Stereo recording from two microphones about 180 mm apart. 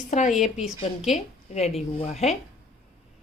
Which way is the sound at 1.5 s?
35° left (ahead or behind).